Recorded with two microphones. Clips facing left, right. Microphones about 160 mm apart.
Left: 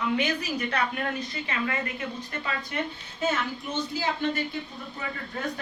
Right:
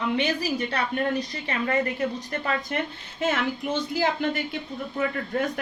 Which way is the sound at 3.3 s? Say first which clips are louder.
Right 6 dB; 55° right (ahead or behind).